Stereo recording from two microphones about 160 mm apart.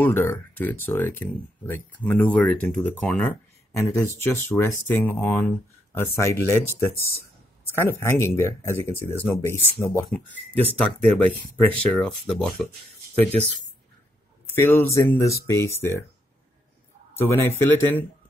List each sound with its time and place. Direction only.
0.0 s speech: 15° left (ahead or behind)
7.7 s speech: 15° left (ahead or behind)
14.5 s speech: 15° left (ahead or behind)
17.1 s speech: 15° left (ahead or behind)